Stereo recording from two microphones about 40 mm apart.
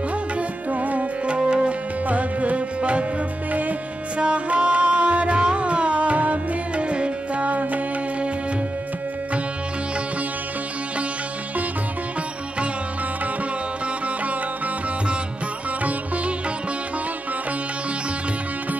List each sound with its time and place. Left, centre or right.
0.4 s music: right
2.0 s music: right
4.2 s music: right